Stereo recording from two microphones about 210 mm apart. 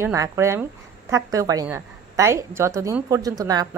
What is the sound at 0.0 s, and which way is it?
A woman's voice, 15° right (ahead or behind).